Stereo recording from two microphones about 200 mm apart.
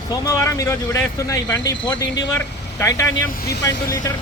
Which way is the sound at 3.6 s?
15° left (ahead or behind).